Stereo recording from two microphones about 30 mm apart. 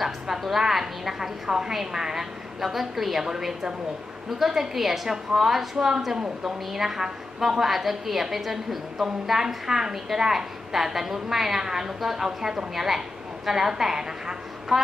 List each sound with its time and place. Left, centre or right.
0.0 s a woman's voice: centre
14.7 s a woman's voice: centre